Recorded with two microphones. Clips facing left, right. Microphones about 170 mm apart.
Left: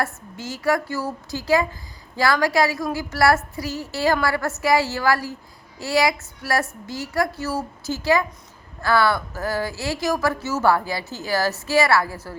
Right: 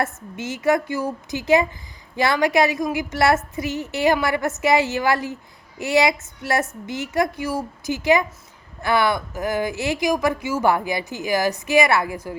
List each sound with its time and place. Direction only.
0.0 s a woman's voice: 20° right (ahead or behind)